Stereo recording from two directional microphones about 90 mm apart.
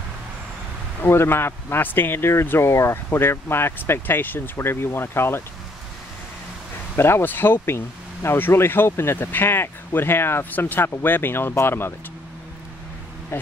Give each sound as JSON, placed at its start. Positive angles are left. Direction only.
{"t": 1.0, "sound": "speech", "side_deg": 25}
{"t": 7.0, "sound": "speech", "side_deg": 25}
{"t": 13.3, "sound": "speech", "side_deg": 25}